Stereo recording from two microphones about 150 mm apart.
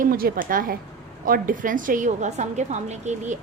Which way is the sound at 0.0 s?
70° right (ahead or behind).